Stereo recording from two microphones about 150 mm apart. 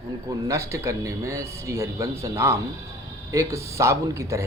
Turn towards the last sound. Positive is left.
turn(degrees=-20)  # may be behind; listen again after turning